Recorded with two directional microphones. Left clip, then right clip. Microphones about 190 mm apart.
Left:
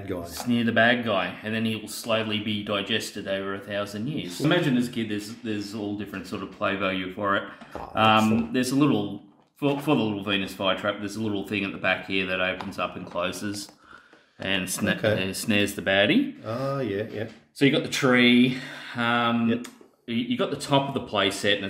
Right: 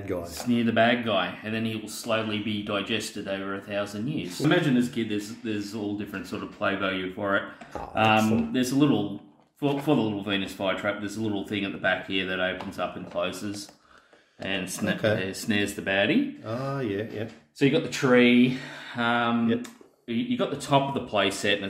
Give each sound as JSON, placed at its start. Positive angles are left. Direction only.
{"t": 0.2, "sound": "speech", "side_deg": 20}
{"t": 14.4, "sound": "speech", "side_deg": 35}
{"t": 16.6, "sound": "speech", "side_deg": 10}
{"t": 17.6, "sound": "speech", "side_deg": 35}